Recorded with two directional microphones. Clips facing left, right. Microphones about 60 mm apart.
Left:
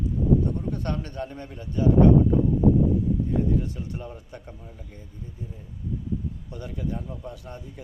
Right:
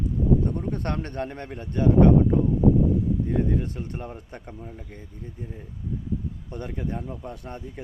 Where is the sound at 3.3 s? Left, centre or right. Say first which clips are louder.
Even; right.